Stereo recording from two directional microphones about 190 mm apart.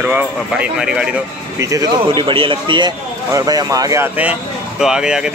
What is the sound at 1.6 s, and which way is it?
Speech, 15° right (ahead or behind).